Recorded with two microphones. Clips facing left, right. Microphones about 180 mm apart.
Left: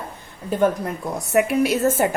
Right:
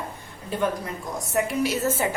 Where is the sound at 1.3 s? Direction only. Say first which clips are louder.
Left 6 dB; 65° left (ahead or behind).